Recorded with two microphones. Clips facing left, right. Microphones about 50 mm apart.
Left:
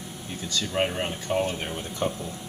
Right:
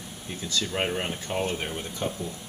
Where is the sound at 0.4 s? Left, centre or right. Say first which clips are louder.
Left 2 dB; centre.